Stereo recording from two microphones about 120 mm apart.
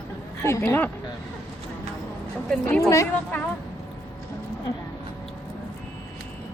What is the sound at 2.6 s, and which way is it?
Speech, 25° left (ahead or behind).